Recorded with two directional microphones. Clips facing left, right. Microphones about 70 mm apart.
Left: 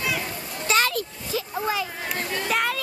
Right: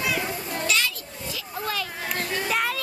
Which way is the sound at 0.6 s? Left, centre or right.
Left.